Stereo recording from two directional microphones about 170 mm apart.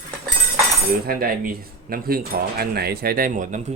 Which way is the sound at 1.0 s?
60° right (ahead or behind).